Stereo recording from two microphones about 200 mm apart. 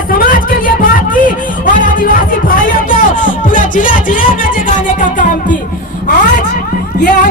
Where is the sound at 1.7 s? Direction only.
45° left (ahead or behind).